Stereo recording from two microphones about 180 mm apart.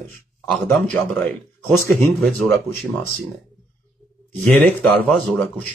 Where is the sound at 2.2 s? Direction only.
Centre (ahead or behind).